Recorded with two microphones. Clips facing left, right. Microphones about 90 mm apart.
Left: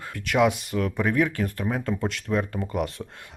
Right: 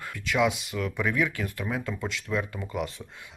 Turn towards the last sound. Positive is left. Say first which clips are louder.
# left 4 dB
turn(degrees=50)  # may be behind; listen again after turning